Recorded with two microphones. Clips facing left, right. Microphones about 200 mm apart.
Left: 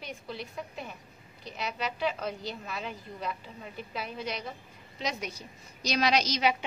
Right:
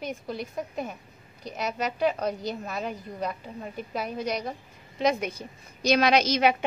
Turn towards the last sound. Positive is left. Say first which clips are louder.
# right 5 dB
turn(degrees=-55)  # may be behind; listen again after turning